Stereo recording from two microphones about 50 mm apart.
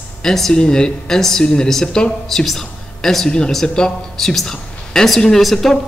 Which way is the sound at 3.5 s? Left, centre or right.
Centre.